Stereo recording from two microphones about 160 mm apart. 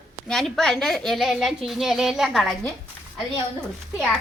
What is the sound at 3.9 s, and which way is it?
Speech, centre (ahead or behind).